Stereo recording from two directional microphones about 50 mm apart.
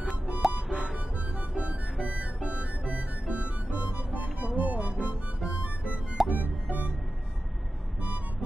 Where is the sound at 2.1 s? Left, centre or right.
Right.